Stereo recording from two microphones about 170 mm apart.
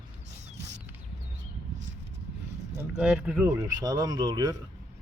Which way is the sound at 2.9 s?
5° right (ahead or behind).